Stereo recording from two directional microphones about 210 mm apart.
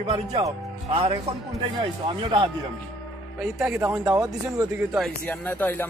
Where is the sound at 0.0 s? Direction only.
30° right (ahead or behind).